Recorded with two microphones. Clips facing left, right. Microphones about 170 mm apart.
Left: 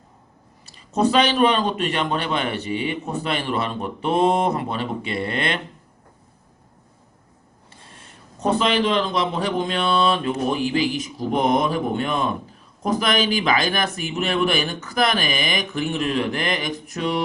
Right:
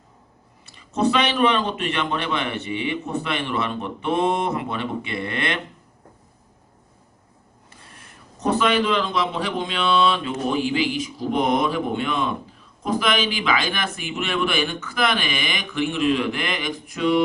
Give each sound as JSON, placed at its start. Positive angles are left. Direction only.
{"t": 0.6, "sound": "a man's voice", "side_deg": 35}
{"t": 7.7, "sound": "a man's voice", "side_deg": 25}